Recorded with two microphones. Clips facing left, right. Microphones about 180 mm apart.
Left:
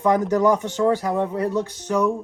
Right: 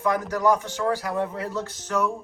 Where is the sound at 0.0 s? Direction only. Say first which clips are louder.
Left 5 dB; 20° left (ahead or behind).